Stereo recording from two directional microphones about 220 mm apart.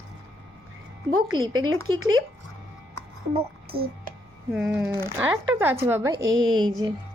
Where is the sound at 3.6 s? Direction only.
45° right (ahead or behind).